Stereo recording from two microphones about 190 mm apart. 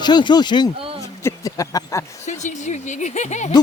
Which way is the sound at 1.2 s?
15° left (ahead or behind).